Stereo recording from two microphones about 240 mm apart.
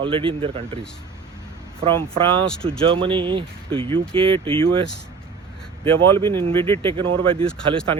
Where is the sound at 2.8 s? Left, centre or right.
Right.